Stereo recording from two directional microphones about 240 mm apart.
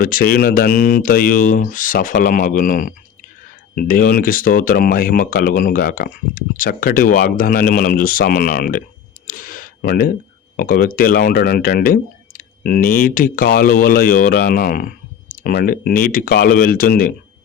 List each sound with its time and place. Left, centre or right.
0.0 s speech: left
9.2 s a sound: left
10.6 s speech: left